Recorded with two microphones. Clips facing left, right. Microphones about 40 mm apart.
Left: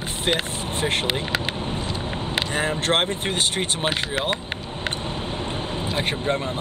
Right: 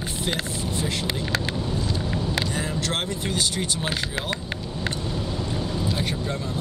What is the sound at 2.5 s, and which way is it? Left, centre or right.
Speech, left.